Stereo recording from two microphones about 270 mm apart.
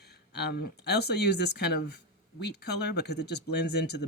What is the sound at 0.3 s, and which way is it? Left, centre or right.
Speech, left.